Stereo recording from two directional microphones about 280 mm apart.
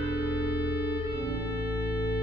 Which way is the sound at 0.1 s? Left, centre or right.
Left.